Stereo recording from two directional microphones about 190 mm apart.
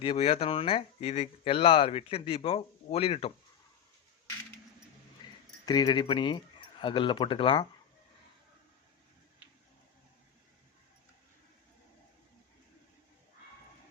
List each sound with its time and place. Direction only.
0.0 s speech: 30° left (ahead or behind)
5.6 s speech: 20° left (ahead or behind)